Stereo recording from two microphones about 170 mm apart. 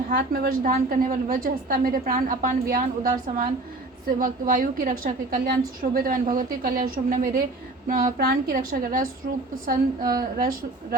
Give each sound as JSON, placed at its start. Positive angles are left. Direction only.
{"t": 0.1, "sound": "a woman's voice", "side_deg": -60}
{"t": 0.7, "sound": "a woman's voice", "side_deg": -50}
{"t": 4.2, "sound": "a woman's voice", "side_deg": -55}